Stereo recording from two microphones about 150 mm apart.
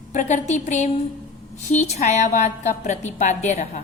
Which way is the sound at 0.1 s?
55° left (ahead or behind).